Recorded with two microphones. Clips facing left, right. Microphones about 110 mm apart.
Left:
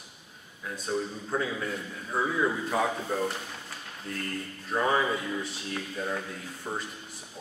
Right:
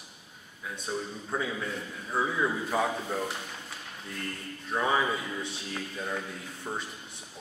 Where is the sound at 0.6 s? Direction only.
Centre (ahead or behind).